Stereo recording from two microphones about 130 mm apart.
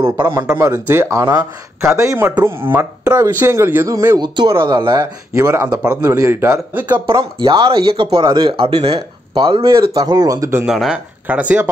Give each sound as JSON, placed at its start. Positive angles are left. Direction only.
{"t": 0.0, "sound": "speech", "side_deg": -20}
{"t": 4.2, "sound": "speech", "side_deg": -35}
{"t": 5.4, "sound": "speech", "side_deg": -20}
{"t": 7.1, "sound": "speech", "side_deg": -35}
{"t": 9.7, "sound": "speech", "side_deg": -30}
{"t": 10.6, "sound": "speech", "side_deg": -5}